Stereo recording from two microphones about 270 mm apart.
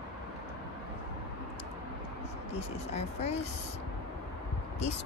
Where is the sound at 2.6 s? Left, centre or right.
Left.